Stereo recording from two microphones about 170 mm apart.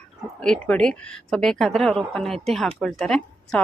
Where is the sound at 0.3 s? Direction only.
5° left (ahead or behind).